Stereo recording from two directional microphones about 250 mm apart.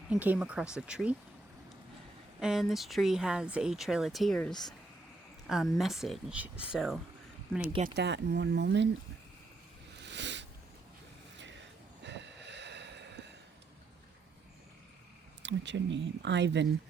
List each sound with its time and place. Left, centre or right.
0.1 s speech: centre
2.4 s speech: centre
7.7 s speech: centre
7.9 s speech: right
10.0 s a sound: right
12.0 s a sound: right
15.4 s speech: right